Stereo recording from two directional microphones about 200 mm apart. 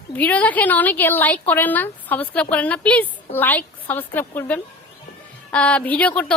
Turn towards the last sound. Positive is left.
turn(degrees=5)  # may be behind; listen again after turning